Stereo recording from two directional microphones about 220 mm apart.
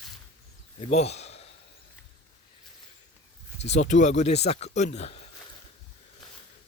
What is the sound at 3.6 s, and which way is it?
Speech, 30° left (ahead or behind).